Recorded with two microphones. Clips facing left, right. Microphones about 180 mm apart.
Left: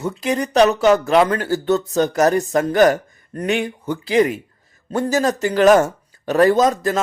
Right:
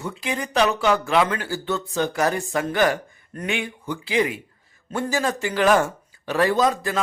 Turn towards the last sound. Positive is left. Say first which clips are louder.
# left 5 dB
turn(degrees=45)  # may be behind; listen again after turning